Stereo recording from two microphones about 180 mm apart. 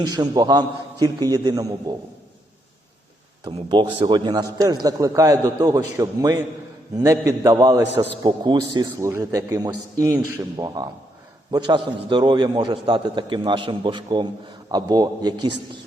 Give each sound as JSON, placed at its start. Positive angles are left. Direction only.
{"t": 0.0, "sound": "a man's voice", "side_deg": -20}
{"t": 3.4, "sound": "a man's voice", "side_deg": -25}